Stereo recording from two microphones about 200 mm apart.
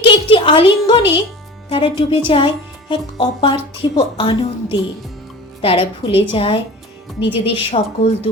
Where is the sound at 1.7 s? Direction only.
25° left (ahead or behind).